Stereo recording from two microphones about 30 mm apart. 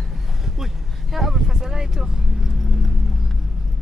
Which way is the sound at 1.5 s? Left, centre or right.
Centre.